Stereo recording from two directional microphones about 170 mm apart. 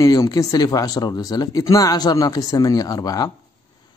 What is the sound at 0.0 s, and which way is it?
Speech, 20° left (ahead or behind).